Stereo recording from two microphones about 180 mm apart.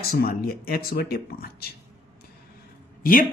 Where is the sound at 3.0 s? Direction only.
50° left (ahead or behind).